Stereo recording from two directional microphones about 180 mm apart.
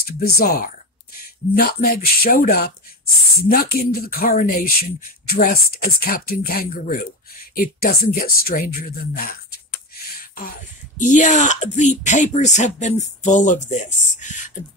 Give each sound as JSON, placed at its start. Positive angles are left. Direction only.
{"t": 0.0, "sound": "speech", "side_deg": 55}
{"t": 10.1, "sound": "a sound", "side_deg": 50}
{"t": 11.0, "sound": "speech", "side_deg": 45}